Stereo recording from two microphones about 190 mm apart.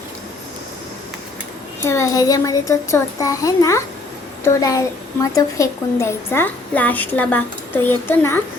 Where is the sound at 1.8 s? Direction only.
15° left (ahead or behind).